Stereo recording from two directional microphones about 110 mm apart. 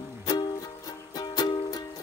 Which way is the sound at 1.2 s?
35° left (ahead or behind).